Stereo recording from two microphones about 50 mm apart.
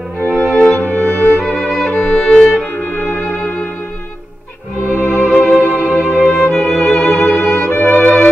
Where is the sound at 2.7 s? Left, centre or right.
Left.